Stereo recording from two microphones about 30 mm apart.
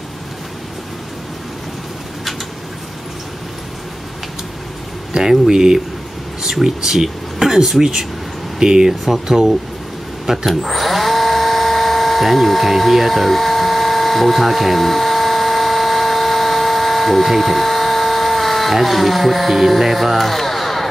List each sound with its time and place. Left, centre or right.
5.5 s speech: right
7.4 s speech: centre
9.0 s speech: centre
10.5 s dental drill: centre
19.8 s a sound: centre